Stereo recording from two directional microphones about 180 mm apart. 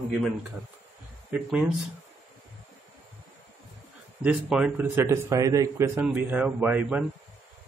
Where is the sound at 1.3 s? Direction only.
5° right (ahead or behind).